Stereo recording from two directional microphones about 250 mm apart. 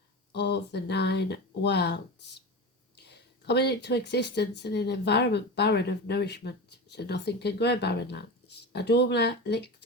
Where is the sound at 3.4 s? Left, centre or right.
Left.